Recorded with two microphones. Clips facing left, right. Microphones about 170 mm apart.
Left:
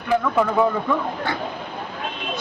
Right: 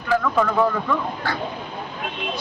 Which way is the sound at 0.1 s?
15° left (ahead or behind).